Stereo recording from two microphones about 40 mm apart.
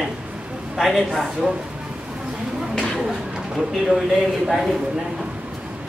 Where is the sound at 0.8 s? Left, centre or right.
Centre.